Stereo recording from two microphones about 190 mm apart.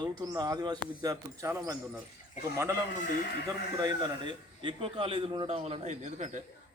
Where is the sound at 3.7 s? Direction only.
20° right (ahead or behind).